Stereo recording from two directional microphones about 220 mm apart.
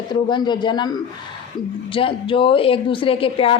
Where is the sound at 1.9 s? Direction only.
25° left (ahead or behind).